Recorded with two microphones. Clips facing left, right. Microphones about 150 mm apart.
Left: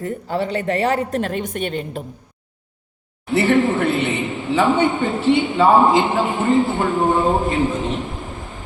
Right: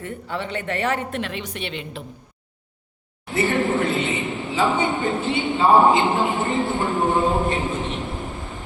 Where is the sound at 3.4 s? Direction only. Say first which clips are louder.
Left 4 dB; 65° left (ahead or behind).